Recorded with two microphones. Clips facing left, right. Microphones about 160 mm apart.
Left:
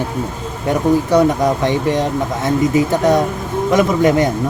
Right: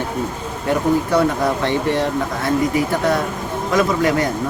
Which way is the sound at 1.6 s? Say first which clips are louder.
Left 2 dB; 15° left (ahead or behind).